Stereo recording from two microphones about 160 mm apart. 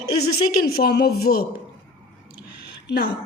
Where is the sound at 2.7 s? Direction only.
90° left.